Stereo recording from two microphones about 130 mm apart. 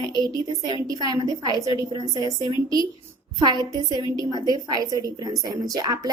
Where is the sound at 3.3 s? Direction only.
30° right (ahead or behind).